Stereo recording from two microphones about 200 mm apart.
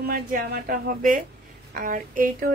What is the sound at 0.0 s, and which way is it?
A woman's voice, 50° right (ahead or behind).